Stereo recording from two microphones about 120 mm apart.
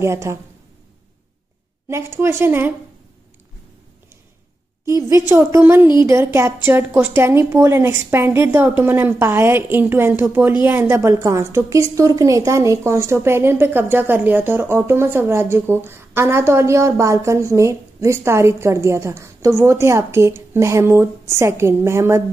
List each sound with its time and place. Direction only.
0.0 s a woman's voice: 25° right (ahead or behind)
1.9 s a woman's voice: 20° right (ahead or behind)
4.8 s a woman's voice: 25° right (ahead or behind)